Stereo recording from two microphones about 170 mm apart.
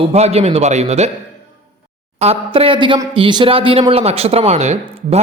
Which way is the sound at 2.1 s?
35° right (ahead or behind).